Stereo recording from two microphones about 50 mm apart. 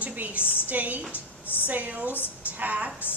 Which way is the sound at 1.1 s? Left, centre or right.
Left.